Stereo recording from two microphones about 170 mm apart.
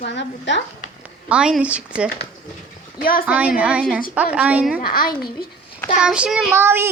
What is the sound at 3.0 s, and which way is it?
Speech, 60° left (ahead or behind).